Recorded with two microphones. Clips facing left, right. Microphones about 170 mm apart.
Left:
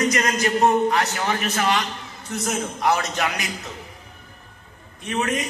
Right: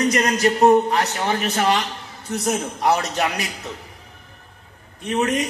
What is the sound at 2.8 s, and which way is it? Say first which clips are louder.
Speech: right 1 dB; 35° right (ahead or behind).